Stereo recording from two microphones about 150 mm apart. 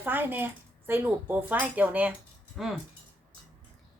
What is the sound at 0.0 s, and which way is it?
Speech, 15° right (ahead or behind).